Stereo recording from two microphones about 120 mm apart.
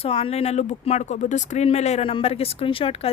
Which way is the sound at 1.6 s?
65° left (ahead or behind).